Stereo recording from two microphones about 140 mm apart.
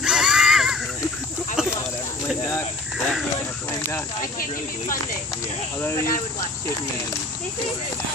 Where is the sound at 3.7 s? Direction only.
20° left (ahead or behind).